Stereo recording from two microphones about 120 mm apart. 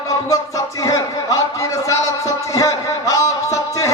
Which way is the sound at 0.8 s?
30° left (ahead or behind).